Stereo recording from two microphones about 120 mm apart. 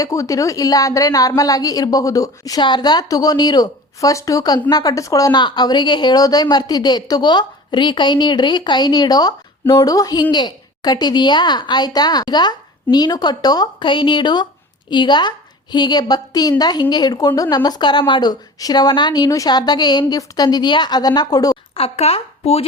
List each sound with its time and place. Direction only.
0.0 s a woman's voice: 25° left (ahead or behind)
21.8 s speech: 60° left (ahead or behind)